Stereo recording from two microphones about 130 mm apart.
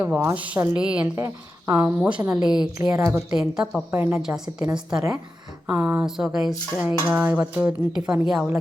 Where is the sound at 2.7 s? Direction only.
20° right (ahead or behind).